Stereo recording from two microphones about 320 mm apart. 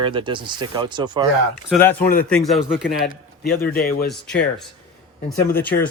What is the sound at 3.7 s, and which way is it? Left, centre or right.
Speech, left.